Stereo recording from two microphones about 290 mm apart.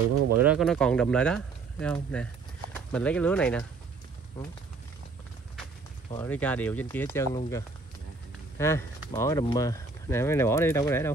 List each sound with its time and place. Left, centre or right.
0.4 s speech: centre
6.2 s speech: centre